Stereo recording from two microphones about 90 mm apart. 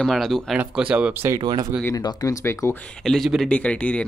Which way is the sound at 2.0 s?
45° left (ahead or behind).